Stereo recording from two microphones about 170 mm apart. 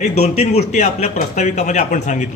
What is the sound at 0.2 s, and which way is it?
A man's voice, 40° left (ahead or behind).